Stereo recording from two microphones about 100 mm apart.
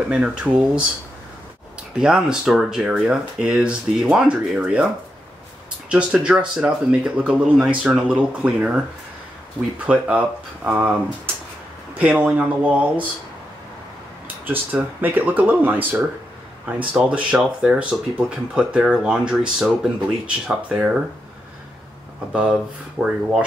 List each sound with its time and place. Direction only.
0.1 s speech: 10° right (ahead or behind)
2.0 s speech: 5° right (ahead or behind)
5.9 s speech: 10° right (ahead or behind)
12.0 s speech: 15° right (ahead or behind)
14.4 s speech: 20° right (ahead or behind)
22.3 s speech: 10° right (ahead or behind)